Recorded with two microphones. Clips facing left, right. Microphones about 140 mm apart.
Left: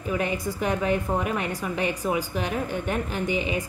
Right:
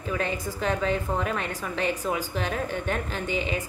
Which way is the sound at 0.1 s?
15° left (ahead or behind).